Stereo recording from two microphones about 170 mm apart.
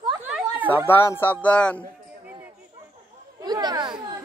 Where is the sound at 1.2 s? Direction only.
10° left (ahead or behind).